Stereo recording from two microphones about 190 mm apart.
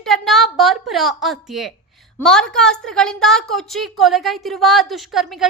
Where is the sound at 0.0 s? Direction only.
Centre (ahead or behind).